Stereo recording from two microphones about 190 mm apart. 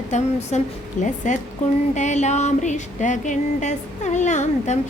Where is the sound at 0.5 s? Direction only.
35° left (ahead or behind).